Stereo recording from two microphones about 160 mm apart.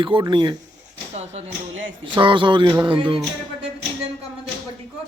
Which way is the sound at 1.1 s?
45° right (ahead or behind).